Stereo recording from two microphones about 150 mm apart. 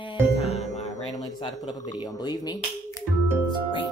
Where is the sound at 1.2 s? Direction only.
30° left (ahead or behind).